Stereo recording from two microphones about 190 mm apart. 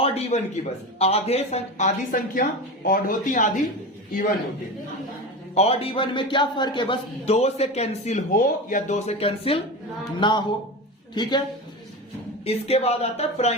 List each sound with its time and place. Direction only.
0.0 s a man's voice: 30° left (ahead or behind)
5.5 s a man's voice: 30° left (ahead or behind)
12.5 s a man's voice: 35° left (ahead or behind)